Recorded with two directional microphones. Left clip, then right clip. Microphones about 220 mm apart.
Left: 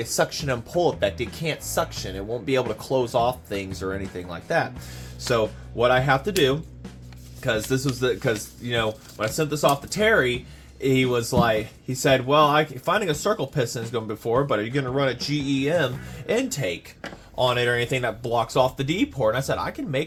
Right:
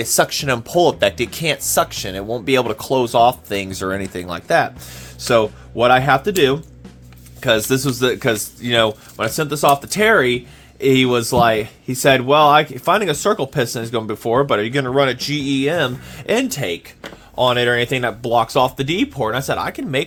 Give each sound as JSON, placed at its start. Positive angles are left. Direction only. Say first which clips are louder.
{"t": 0.0, "sound": "speech", "louder": "right 7 dB", "side_deg": -50}